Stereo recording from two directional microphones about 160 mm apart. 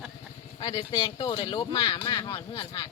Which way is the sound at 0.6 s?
25° left (ahead or behind).